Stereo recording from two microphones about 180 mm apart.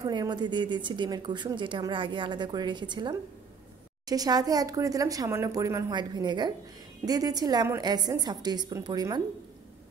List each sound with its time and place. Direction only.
0.0 s a woman's voice: 20° right (ahead or behind)